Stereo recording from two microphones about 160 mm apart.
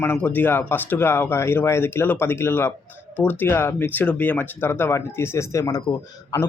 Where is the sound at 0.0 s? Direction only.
10° left (ahead or behind).